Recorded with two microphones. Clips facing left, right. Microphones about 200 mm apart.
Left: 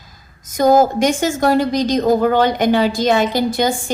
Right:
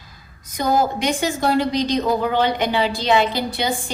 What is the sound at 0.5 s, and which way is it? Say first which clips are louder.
A woman's voice: left 7 dB; 45° left (ahead or behind).